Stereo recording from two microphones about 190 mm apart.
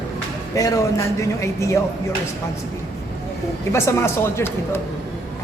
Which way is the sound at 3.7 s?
15° left (ahead or behind).